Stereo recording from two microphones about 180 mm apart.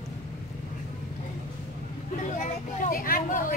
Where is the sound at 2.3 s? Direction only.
45° left (ahead or behind).